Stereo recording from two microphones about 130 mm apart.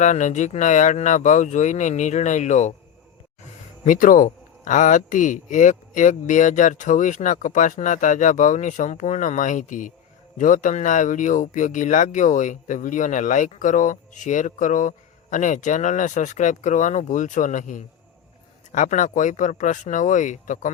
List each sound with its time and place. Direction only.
0.0 s speech: 70° left (ahead or behind)
3.8 s speech: 90° left; by 20.7 s 75° left (ahead or behind)